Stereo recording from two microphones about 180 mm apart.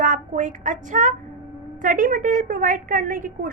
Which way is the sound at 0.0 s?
45° right (ahead or behind).